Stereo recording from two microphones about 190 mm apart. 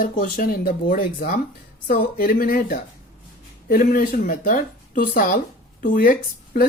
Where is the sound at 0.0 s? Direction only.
45° left (ahead or behind).